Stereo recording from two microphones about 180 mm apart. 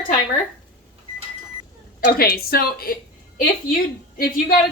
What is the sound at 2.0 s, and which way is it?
A woman's voice, 55° left (ahead or behind).